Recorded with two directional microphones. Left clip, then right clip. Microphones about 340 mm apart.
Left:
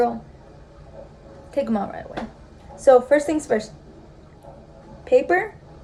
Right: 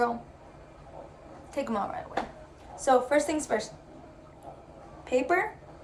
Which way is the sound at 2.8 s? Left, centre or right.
Centre.